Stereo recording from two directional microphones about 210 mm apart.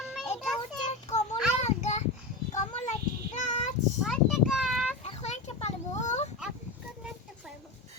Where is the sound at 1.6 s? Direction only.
30° left (ahead or behind).